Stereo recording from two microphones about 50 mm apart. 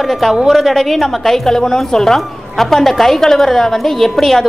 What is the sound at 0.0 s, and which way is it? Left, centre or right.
A woman's voice, centre.